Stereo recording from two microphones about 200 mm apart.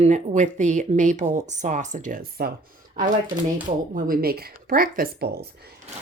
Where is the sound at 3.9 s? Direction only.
45° right (ahead or behind).